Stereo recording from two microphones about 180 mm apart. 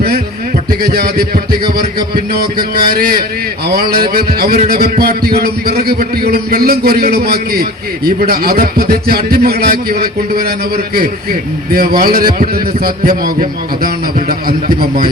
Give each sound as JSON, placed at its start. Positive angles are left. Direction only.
{"t": 0.7, "sound": "a man's voice", "side_deg": -55}